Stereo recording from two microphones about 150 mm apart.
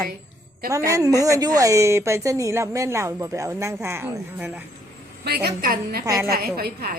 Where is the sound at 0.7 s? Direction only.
20° right (ahead or behind).